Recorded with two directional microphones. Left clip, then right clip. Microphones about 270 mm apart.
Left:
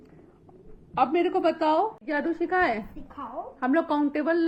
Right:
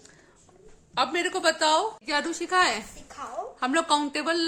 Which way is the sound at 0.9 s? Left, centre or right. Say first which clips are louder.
Left 3 dB; centre.